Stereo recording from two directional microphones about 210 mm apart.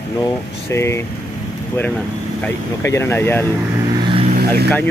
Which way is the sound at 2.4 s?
10° left (ahead or behind).